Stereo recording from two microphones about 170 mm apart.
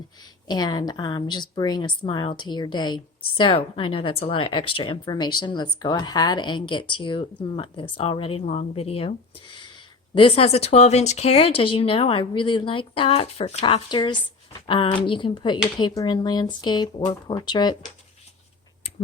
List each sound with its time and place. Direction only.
0.4 s speech: 25° left (ahead or behind)